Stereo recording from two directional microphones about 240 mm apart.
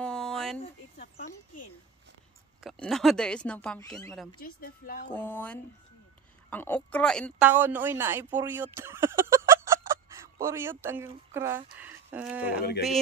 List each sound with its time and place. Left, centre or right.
0.0 s a sound: centre
0.9 s a sound: left
2.6 s speech: centre
4.4 s speech: left
5.1 s speech: centre
7.4 s speech: centre